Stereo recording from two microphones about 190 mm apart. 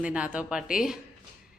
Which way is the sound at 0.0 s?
5° right (ahead or behind).